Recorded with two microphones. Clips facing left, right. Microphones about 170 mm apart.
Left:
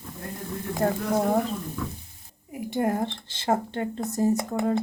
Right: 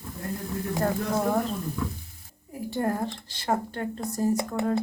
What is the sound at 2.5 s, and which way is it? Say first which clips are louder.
Speech: left 2 dB; 15° left (ahead or behind).